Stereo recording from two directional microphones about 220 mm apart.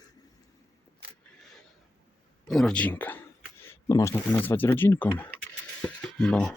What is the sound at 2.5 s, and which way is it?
Speech, 5° left (ahead or behind).